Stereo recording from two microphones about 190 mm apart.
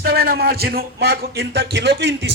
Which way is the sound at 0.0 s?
55° right (ahead or behind).